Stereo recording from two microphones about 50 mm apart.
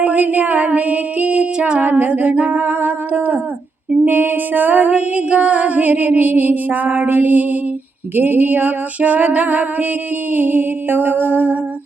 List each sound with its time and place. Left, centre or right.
0.0 s music: right
1.5 s music: centre
1.8 s music: right
4.0 s music: right